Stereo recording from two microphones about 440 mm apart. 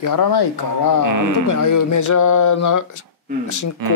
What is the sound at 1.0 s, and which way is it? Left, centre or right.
Speech, right.